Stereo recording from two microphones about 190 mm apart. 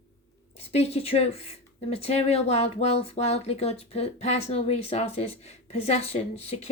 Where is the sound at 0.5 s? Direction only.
35° left (ahead or behind).